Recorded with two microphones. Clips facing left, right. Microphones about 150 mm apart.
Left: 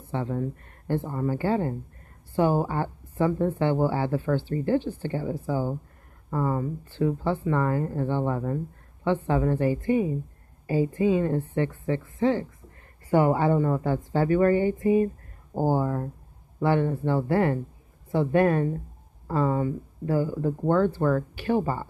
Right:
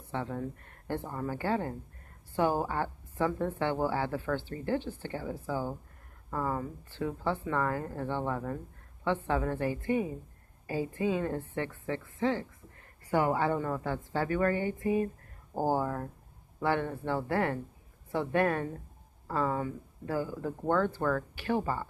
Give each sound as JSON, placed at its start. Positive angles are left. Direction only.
{"t": 0.0, "sound": "speech", "side_deg": 15}
{"t": 4.7, "sound": "speech", "side_deg": 35}
{"t": 5.1, "sound": "a woman's voice", "side_deg": 15}